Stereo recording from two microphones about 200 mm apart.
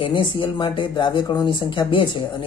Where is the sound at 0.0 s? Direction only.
25° left (ahead or behind).